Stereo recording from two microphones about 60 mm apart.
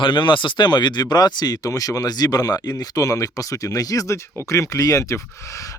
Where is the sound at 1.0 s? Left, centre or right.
Left.